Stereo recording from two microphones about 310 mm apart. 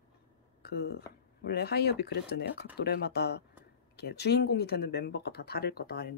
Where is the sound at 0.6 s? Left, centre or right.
Left.